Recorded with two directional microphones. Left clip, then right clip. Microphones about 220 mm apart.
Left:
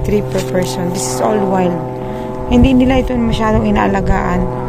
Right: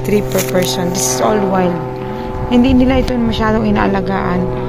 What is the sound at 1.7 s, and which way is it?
Boat, 15° right (ahead or behind).